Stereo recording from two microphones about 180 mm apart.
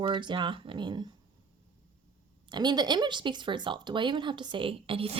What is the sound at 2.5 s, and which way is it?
Speech, 25° right (ahead or behind).